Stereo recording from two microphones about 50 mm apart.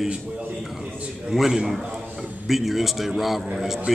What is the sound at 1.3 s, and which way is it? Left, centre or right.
A man's voice, centre.